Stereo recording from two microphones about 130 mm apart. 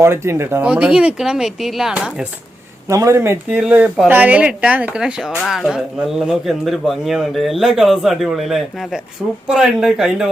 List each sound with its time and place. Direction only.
0.0 s speech: 20° right (ahead or behind)
0.6 s speech: 10° right (ahead or behind)
2.9 s speech: 25° right (ahead or behind)
3.6 s speech: 10° right (ahead or behind)